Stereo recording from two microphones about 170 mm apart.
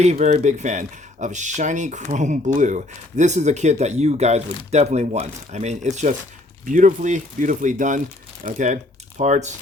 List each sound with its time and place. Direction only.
0.0 s speech: 40° right (ahead or behind)